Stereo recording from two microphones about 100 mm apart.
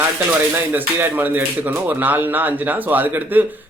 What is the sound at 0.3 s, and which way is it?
Speech, 20° right (ahead or behind).